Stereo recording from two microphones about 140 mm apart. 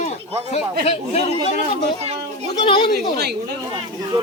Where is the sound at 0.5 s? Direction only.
50° left (ahead or behind).